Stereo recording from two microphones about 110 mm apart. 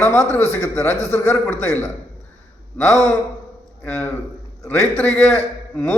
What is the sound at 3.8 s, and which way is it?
A man's voice, 15° left (ahead or behind).